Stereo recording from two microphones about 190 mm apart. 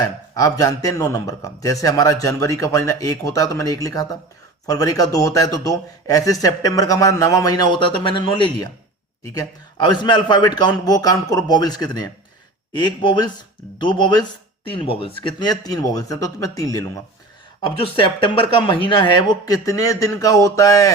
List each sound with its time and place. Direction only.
0.0 s a man's voice: 20° left (ahead or behind)
17.7 s speech: 25° left (ahead or behind)